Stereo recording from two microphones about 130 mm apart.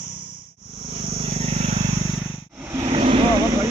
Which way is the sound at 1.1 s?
50° right (ahead or behind).